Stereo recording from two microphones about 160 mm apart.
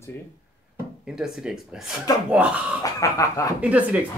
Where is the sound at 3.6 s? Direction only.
10° right (ahead or behind).